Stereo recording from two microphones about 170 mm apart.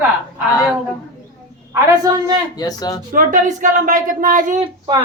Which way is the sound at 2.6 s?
20° left (ahead or behind).